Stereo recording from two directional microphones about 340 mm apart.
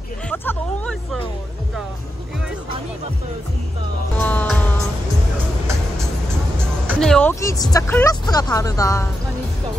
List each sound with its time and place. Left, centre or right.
0.3 s hubbub: centre
4.2 s music: centre
6.9 s speech: centre